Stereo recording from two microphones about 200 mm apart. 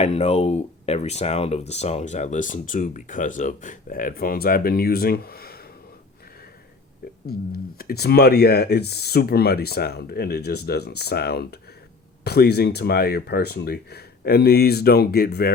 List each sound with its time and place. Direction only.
0.0 s speech: 35° left (ahead or behind); by 5.6 s 50° left (ahead or behind)
7.3 s speech: 50° left (ahead or behind)